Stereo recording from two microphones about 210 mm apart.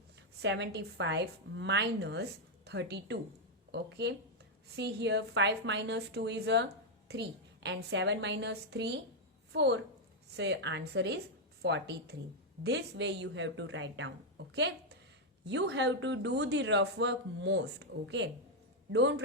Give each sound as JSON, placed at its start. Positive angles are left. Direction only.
{"t": 0.2, "sound": "a man's voice", "side_deg": -55}